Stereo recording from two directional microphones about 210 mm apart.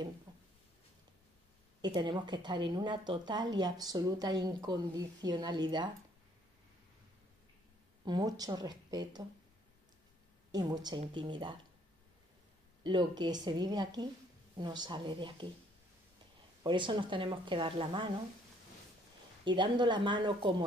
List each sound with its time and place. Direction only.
1.8 s a woman's voice: 20° right (ahead or behind)
8.0 s a woman's voice: 20° right (ahead or behind)
10.5 s a woman's voice: 20° right (ahead or behind)
12.8 s a woman's voice: 20° right (ahead or behind)
16.6 s a woman's voice: 20° right (ahead or behind)
19.4 s a woman's voice: 20° right (ahead or behind)